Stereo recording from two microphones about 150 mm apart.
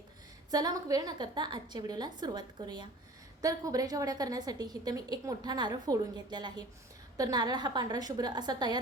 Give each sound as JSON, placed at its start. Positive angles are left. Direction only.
{"t": 0.5, "sound": "a woman's voice", "side_deg": -25}